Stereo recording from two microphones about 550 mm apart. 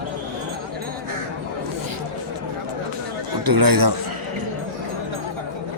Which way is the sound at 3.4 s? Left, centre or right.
Right.